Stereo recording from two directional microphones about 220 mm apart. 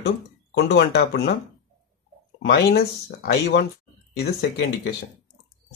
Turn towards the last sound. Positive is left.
turn(degrees=50)  # may be behind; listen again after turning